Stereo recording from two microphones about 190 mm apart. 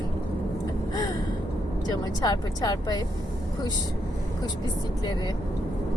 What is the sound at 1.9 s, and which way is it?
Speech, 20° left (ahead or behind).